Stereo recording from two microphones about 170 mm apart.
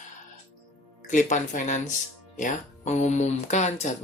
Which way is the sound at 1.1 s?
45° left (ahead or behind).